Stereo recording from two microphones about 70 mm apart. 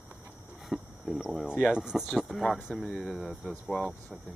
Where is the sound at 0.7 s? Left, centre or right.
Centre.